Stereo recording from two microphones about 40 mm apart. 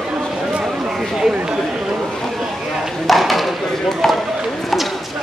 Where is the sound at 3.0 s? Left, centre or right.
Centre.